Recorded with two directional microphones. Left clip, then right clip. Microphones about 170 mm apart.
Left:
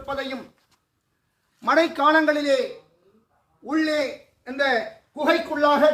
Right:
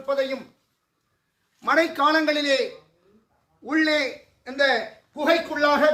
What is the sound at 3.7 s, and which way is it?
A man's voice, 30° right (ahead or behind).